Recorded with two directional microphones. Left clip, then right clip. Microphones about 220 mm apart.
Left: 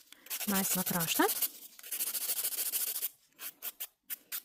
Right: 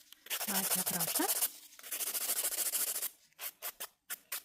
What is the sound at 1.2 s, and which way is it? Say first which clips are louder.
Speech: left 7 dB; 55° left (ahead or behind).